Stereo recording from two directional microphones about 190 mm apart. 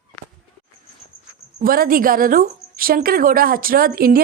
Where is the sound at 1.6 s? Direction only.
50° right (ahead or behind).